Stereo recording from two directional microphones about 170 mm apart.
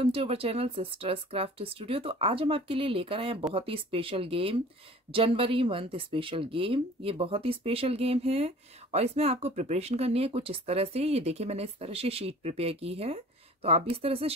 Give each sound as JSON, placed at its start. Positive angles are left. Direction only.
{"t": 0.0, "sound": "speech", "side_deg": -35}